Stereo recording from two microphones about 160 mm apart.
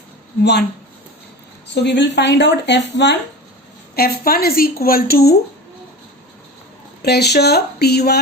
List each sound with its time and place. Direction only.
1.6 s speech: 90° left
3.9 s a woman's voice: 70° left (ahead or behind)
7.0 s speech: 90° left